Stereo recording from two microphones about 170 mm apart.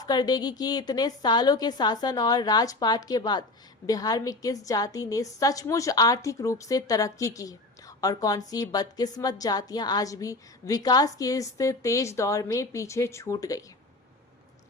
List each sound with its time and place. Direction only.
0.0 s a woman's voice: 25° left (ahead or behind)